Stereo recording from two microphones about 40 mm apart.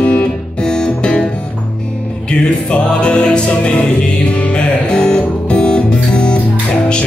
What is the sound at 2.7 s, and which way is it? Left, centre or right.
Music, left.